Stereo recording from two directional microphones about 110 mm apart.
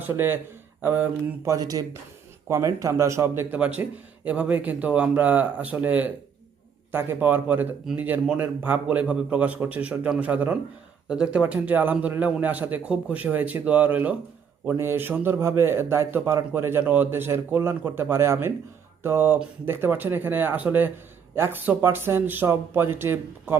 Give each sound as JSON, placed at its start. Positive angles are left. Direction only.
{"t": 0.0, "sound": "a man's voice", "side_deg": -20}
{"t": 1.5, "sound": "a man's voice", "side_deg": -35}